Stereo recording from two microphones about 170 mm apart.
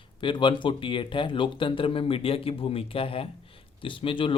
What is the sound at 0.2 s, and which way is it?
Speech, 30° left (ahead or behind).